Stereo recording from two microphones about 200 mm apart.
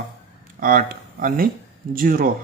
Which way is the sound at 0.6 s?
45° right (ahead or behind).